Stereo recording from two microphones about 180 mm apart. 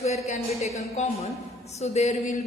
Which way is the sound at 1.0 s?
40° left (ahead or behind).